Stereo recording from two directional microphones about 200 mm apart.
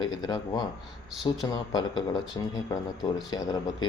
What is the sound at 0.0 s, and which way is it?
A man's voice, 20° left (ahead or behind).